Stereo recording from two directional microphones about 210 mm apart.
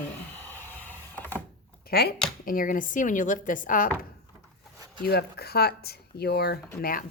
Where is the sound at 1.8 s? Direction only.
50° left (ahead or behind).